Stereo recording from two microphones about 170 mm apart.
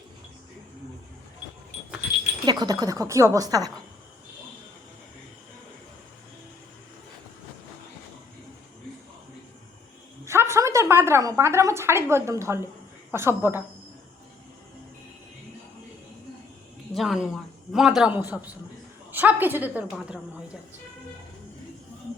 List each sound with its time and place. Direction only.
2.5 s speech: 20° right (ahead or behind)
10.2 s a sound: 15° right (ahead or behind)
13.1 s a woman's voice: 15° right (ahead or behind)
16.9 s a man's voice: centre (ahead or behind)